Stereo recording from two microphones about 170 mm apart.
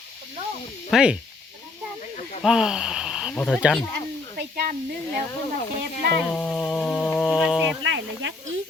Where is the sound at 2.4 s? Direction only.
5° right (ahead or behind).